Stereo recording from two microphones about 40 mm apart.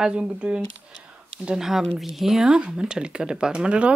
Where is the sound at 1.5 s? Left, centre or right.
Centre.